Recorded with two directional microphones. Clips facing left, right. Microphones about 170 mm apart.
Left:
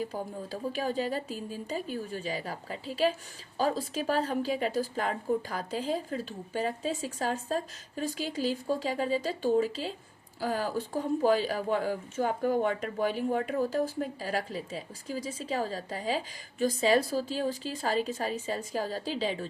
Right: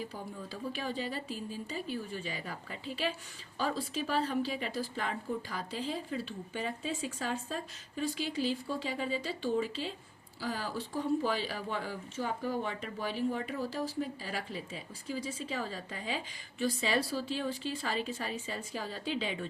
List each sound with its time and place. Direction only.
0.0 s speech: 45° left (ahead or behind)